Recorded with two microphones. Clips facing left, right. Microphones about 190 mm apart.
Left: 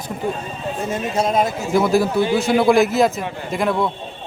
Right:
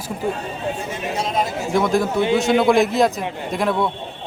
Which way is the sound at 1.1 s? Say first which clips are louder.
Left 4 dB; 50° left (ahead or behind).